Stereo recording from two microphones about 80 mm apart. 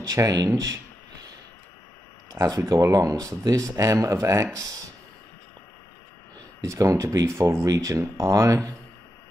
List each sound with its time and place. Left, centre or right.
0.0 s speech: right
2.4 s speech: right
2.7 s speech: right
6.6 s speech: right